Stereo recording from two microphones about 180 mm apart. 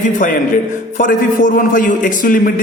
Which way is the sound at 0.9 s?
50° left (ahead or behind).